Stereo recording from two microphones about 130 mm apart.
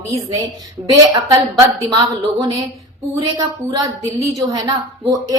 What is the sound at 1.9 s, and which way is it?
Speech, 25° right (ahead or behind).